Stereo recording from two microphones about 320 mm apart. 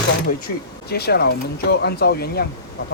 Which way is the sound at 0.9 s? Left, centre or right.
Left.